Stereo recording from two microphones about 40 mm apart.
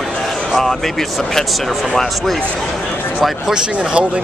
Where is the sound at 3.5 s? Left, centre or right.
Right.